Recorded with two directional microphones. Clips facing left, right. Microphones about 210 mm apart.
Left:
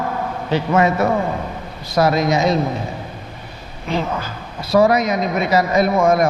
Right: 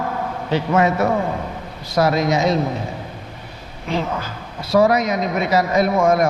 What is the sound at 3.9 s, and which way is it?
A man's voice, 20° left (ahead or behind).